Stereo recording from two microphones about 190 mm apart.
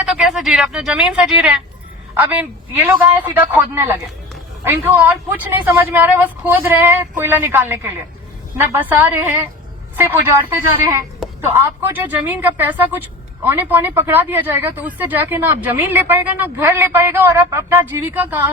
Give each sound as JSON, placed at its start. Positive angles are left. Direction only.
{"t": 0.0, "sound": "a woman's voice", "side_deg": 0}